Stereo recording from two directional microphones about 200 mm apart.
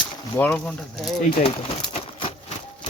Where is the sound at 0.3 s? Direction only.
5° left (ahead or behind).